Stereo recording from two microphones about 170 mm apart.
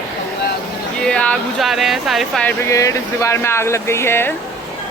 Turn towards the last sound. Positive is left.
turn(degrees=15)  # may be behind; listen again after turning